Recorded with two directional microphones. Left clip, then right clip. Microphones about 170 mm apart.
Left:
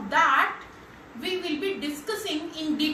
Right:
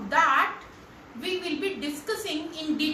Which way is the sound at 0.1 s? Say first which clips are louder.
Left 1 dB; centre (ahead or behind).